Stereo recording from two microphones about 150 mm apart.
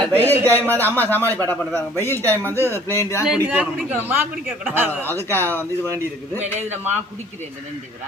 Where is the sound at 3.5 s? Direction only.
10° right (ahead or behind).